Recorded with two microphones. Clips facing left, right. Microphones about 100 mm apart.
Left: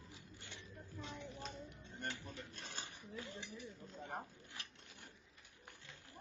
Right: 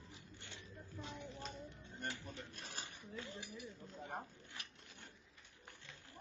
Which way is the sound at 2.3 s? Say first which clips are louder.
Even; 25° right (ahead or behind).